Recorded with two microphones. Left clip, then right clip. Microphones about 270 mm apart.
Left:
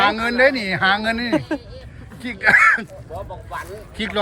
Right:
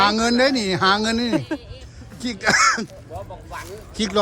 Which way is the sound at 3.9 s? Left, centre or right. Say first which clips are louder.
Right 2 dB; centre.